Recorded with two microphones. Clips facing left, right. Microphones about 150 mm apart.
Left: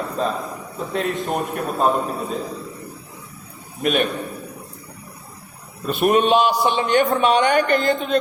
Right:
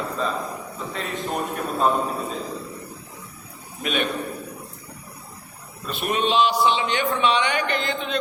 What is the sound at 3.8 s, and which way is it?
Speech, 45° left (ahead or behind).